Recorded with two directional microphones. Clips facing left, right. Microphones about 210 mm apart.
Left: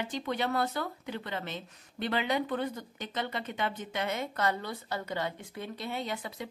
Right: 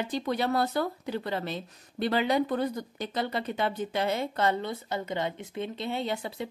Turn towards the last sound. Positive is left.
turn(degrees=-30)  # may be behind; listen again after turning